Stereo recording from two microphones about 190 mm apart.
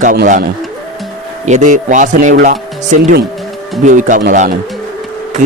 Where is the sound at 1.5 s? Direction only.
40° right (ahead or behind).